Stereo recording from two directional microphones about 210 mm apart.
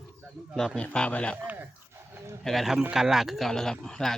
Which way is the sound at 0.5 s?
5° left (ahead or behind).